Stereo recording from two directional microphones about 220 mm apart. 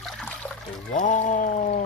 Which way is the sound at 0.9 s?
35° left (ahead or behind).